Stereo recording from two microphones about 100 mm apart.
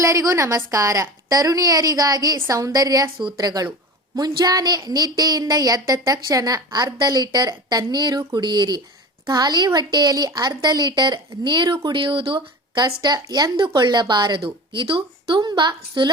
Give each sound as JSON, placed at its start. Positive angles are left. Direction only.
{"t": 0.0, "sound": "a woman's voice", "side_deg": -30}
{"t": 12.8, "sound": "a woman's voice", "side_deg": -45}
{"t": 15.4, "sound": "a woman's voice", "side_deg": -45}